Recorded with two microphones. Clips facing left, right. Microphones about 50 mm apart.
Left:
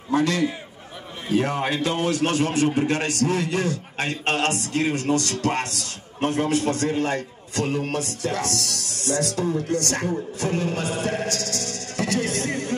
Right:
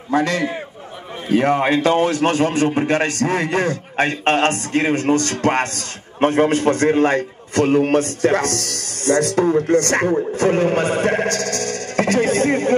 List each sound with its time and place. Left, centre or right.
0.1 s a man's voice: right